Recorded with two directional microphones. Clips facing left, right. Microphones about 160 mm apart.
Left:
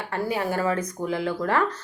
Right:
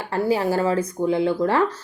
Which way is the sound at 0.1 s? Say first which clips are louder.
Right 6 dB; 30° right (ahead or behind).